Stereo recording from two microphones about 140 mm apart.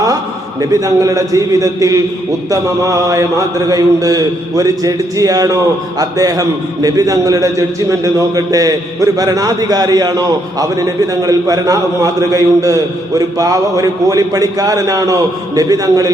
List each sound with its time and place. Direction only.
0.7 s a man's voice: 25° right (ahead or behind)